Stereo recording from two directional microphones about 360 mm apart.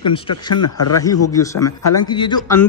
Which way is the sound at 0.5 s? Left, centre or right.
Left.